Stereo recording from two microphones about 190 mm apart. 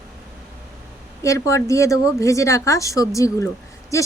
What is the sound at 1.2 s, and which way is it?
Speech, 15° left (ahead or behind).